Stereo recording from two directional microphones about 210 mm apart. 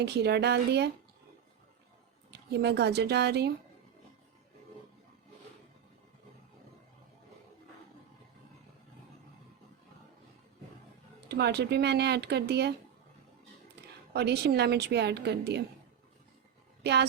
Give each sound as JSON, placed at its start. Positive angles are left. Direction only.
{"t": 0.0, "sound": "a woman's voice", "side_deg": -50}
{"t": 2.3, "sound": "a woman's voice", "side_deg": -50}
{"t": 11.3, "sound": "a woman's voice", "side_deg": -50}
{"t": 14.1, "sound": "a woman's voice", "side_deg": -50}
{"t": 16.8, "sound": "speech", "side_deg": -50}